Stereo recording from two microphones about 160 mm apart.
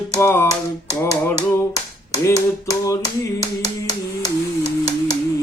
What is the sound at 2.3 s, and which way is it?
Tap, 20° left (ahead or behind).